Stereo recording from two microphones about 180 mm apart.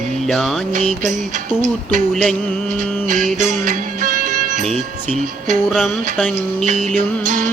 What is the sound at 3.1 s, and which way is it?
Music, 45° right (ahead or behind).